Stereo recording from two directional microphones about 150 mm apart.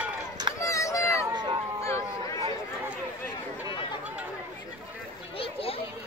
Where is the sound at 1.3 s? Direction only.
30° right (ahead or behind).